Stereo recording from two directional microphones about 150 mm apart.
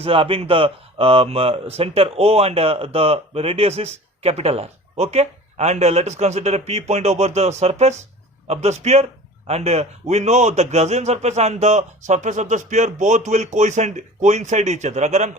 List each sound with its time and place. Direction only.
0.0 s a man's voice: 40° right (ahead or behind)